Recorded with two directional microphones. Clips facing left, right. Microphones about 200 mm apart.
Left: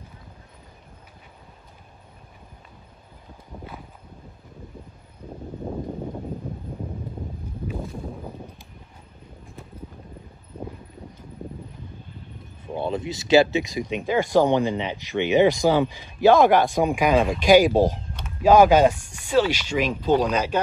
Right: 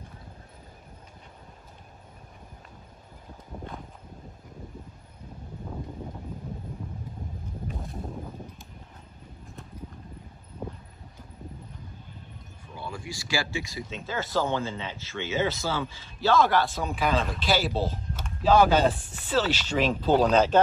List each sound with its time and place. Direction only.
12.8 s speech: 20° left (ahead or behind)